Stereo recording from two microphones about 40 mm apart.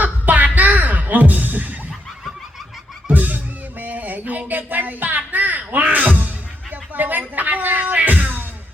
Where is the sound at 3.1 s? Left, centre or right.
Right.